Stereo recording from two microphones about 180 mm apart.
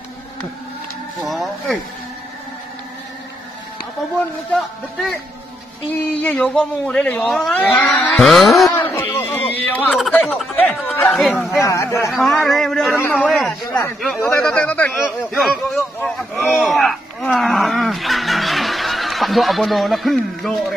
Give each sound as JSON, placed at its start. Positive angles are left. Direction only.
{"t": 1.2, "sound": "a sound", "side_deg": 0}
{"t": 5.9, "sound": "speech", "side_deg": 10}
{"t": 8.7, "sound": "a sound", "side_deg": 15}
{"t": 11.0, "sound": "speech", "side_deg": 10}
{"t": 11.2, "sound": "speech", "side_deg": 0}
{"t": 11.6, "sound": "speech", "side_deg": 15}
{"t": 12.1, "sound": "a man's voice", "side_deg": 0}